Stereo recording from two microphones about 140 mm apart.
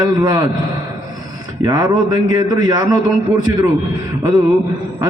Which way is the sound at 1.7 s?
30° right (ahead or behind).